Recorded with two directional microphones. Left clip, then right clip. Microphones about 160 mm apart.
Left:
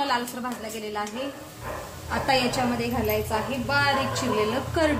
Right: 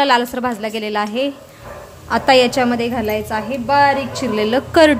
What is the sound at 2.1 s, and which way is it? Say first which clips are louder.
A woman's voice: right 11 dB; 80° right.